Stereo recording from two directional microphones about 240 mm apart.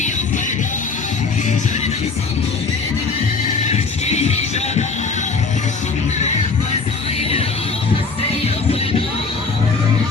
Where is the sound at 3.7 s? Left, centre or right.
Left.